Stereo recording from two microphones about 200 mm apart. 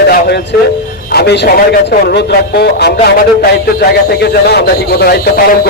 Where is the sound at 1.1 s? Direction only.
55° left (ahead or behind).